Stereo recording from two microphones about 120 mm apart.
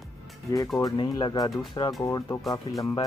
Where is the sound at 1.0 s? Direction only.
35° left (ahead or behind).